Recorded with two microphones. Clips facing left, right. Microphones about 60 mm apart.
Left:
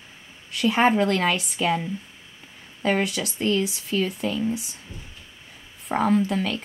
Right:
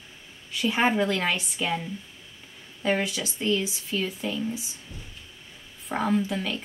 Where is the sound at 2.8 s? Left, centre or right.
Left.